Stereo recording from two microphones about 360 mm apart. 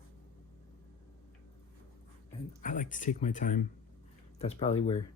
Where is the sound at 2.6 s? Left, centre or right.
Left.